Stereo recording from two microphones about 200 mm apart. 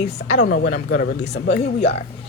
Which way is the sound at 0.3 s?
45° left (ahead or behind).